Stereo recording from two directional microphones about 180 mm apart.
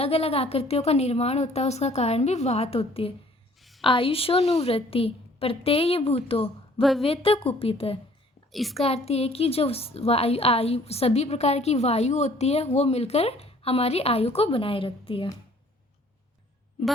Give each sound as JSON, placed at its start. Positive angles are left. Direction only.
{"t": 0.0, "sound": "a woman's voice", "side_deg": 35}
{"t": 3.6, "sound": "a sound", "side_deg": 0}
{"t": 3.8, "sound": "a woman's voice", "side_deg": 30}
{"t": 8.5, "sound": "a child's voice", "side_deg": 0}
{"t": 8.8, "sound": "a woman's voice", "side_deg": 35}